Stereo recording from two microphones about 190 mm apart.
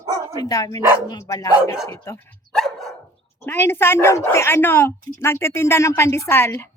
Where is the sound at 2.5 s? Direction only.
Centre (ahead or behind).